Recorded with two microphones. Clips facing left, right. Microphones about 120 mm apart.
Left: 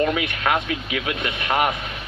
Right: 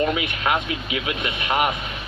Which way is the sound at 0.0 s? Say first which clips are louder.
Left 1 dB; 15° right (ahead or behind).